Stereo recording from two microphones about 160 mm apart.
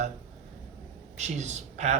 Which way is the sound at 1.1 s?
45° right (ahead or behind).